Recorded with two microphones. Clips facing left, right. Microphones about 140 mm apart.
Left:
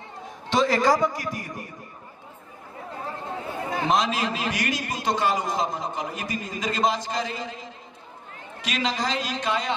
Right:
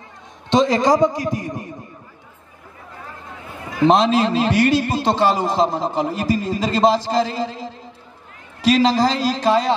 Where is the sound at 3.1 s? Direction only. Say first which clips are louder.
Left 5 dB; 30° left (ahead or behind).